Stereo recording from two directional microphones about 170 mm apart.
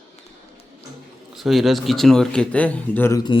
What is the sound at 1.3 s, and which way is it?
Speech, centre (ahead or behind).